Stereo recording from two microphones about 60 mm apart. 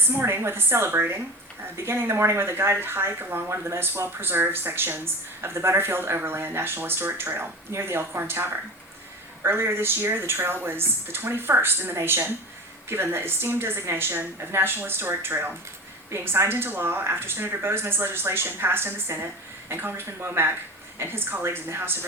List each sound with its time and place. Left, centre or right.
0.1 s speech: right